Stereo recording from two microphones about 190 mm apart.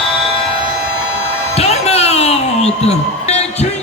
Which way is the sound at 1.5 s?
35° left (ahead or behind).